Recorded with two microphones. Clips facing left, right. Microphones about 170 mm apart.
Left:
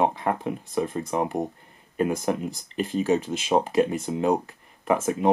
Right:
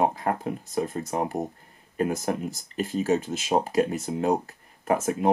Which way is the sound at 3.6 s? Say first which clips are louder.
Left 2 dB; 40° right (ahead or behind).